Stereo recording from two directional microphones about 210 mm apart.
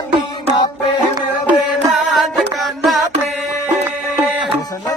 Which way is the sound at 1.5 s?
Centre (ahead or behind).